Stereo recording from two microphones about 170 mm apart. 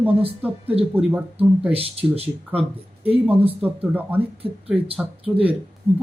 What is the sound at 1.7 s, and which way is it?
Speech, 35° right (ahead or behind).